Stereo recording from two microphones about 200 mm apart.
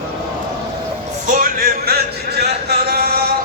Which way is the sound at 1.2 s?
45° right (ahead or behind).